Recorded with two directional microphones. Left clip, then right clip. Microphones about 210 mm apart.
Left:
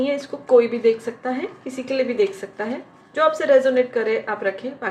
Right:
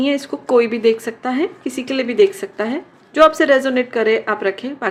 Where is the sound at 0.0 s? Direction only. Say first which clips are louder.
Right 4 dB; 55° right (ahead or behind).